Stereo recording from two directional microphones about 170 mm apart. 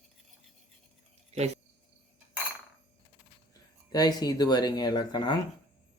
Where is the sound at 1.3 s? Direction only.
40° right (ahead or behind).